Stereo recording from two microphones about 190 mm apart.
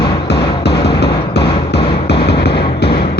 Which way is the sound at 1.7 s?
60° left (ahead or behind).